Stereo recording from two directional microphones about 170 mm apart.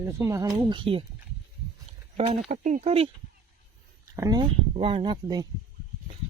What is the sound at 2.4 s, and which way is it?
Speech, 45° right (ahead or behind).